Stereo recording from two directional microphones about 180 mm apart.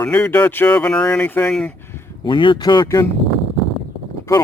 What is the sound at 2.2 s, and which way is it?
Speech, 25° left (ahead or behind).